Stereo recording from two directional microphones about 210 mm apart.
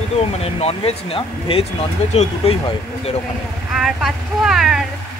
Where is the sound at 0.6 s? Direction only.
30° left (ahead or behind).